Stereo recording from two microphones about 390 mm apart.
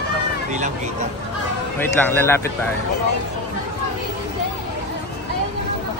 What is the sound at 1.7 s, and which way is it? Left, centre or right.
Speech, centre.